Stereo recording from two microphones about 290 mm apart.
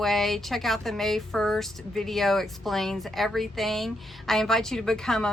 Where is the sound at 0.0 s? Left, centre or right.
Centre.